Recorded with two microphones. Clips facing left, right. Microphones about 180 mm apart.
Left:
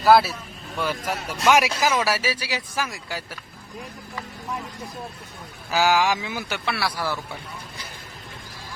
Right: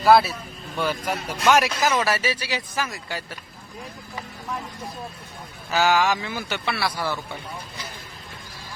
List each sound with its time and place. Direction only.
0.0 s speech: 5° left (ahead or behind)
5.7 s speech: 5° left (ahead or behind)